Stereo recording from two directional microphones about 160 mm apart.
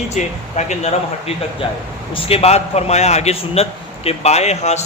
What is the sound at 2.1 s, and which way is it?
A man's voice, 35° left (ahead or behind).